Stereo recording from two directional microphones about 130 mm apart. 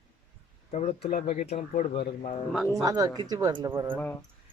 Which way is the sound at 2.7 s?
30° right (ahead or behind).